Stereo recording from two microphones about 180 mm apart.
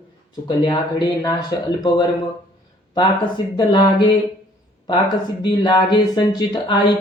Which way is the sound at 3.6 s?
20° left (ahead or behind).